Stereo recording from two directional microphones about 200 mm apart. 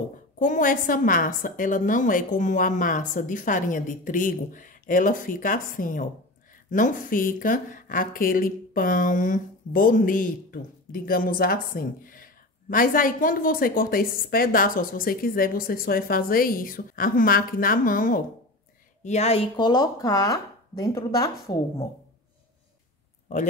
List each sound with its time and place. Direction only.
0.4 s a woman's voice: 40° left (ahead or behind)
19.0 s a woman's voice: 35° left (ahead or behind)
19.5 s speech: 20° left (ahead or behind)